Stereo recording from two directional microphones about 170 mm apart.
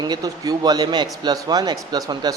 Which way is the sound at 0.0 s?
25° right (ahead or behind).